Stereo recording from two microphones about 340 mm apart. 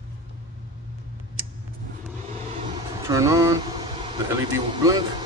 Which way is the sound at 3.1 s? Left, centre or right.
Centre.